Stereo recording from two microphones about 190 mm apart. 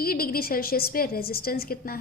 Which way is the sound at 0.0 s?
50° left (ahead or behind).